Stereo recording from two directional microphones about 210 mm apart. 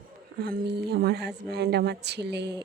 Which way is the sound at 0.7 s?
50° right (ahead or behind).